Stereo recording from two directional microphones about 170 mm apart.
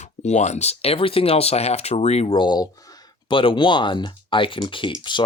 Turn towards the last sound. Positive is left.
turn(degrees=30)  # may be behind; listen again after turning